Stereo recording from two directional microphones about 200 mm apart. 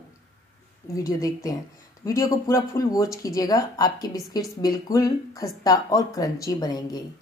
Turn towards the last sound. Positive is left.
turn(degrees=20)  # may be behind; listen again after turning